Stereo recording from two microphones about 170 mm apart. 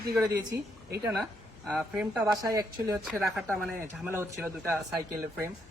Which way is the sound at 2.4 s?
20° right (ahead or behind).